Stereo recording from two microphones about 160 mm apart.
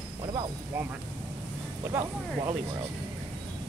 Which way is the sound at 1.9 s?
20° right (ahead or behind).